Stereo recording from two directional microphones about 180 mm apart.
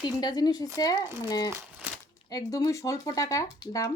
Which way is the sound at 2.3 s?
20° left (ahead or behind).